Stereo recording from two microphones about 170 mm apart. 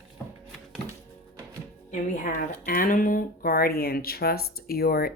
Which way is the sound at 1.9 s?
50° left (ahead or behind).